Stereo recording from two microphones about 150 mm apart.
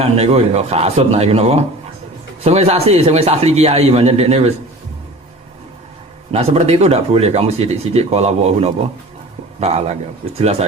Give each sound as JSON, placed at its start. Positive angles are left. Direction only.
{"t": 0.0, "sound": "speech", "side_deg": -40}
{"t": 6.3, "sound": "speech", "side_deg": -45}